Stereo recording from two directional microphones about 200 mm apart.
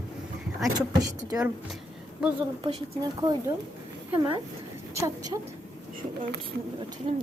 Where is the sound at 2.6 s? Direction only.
20° right (ahead or behind).